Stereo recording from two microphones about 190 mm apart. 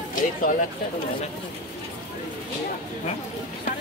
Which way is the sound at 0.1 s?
45° left (ahead or behind).